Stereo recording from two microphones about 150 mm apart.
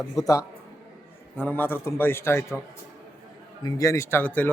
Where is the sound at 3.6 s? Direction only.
20° left (ahead or behind).